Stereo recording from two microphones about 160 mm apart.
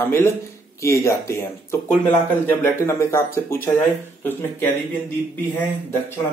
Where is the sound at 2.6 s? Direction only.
15° left (ahead or behind).